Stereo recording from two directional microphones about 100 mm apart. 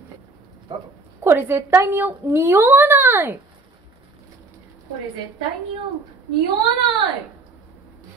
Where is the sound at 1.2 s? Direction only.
25° right (ahead or behind).